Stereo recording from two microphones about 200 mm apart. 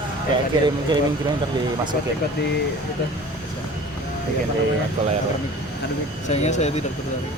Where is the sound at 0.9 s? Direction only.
20° right (ahead or behind).